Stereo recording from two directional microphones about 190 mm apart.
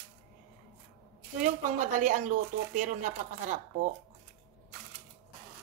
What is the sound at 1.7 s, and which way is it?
Speech, 45° right (ahead or behind).